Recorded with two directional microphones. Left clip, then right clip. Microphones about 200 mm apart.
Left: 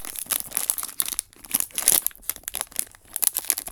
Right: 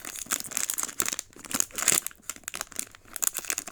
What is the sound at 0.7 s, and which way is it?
Crumpling, 10° right (ahead or behind).